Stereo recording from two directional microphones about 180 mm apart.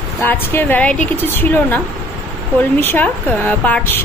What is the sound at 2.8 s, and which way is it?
A woman's voice, 10° left (ahead or behind).